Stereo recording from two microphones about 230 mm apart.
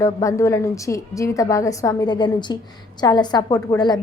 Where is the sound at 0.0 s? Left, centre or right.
Centre.